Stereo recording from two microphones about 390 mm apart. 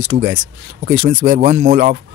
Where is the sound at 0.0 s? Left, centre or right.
Right.